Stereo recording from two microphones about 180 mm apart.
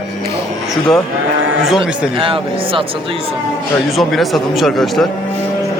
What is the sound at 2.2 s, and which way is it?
Speech, 30° right (ahead or behind).